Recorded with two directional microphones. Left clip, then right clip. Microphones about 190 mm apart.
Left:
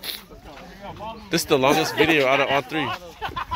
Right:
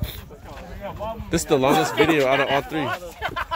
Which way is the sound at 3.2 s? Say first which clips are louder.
Right 2 dB; 15° right (ahead or behind).